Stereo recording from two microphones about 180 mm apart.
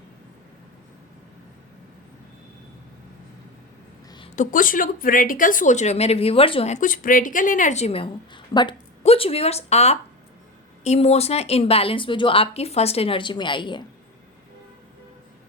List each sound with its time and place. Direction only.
4.4 s speech: 50° left (ahead or behind); by 13.8 s 25° left (ahead or behind)